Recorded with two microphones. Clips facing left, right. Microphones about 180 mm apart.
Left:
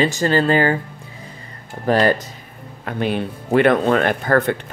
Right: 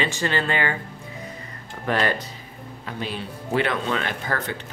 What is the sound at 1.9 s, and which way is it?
Speech, 40° left (ahead or behind).